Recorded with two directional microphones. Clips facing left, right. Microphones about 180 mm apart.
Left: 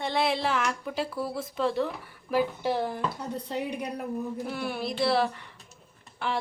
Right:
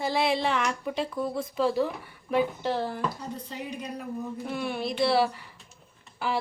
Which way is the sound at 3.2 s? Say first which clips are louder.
Left 4 dB; 65° left (ahead or behind).